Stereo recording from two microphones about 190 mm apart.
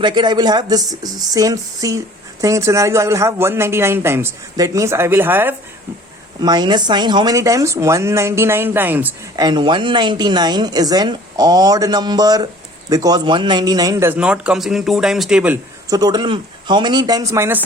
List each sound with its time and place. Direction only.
0.0 s a woman's voice: 20° right (ahead or behind)
6.4 s speech: 20° right (ahead or behind)
9.3 s a woman's voice: 20° right (ahead or behind); by 15.5 s 5° right (ahead or behind)
15.9 s a woman's voice: 20° right (ahead or behind)